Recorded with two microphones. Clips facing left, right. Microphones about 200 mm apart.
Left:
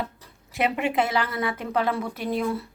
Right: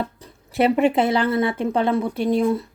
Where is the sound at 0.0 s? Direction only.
30° right (ahead or behind).